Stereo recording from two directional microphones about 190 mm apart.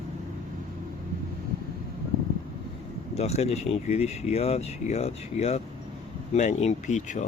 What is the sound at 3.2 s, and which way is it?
Speech, 35° left (ahead or behind).